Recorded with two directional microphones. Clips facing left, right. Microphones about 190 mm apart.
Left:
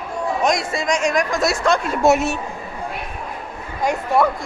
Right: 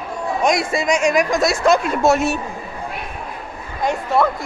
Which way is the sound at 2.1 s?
20° left (ahead or behind).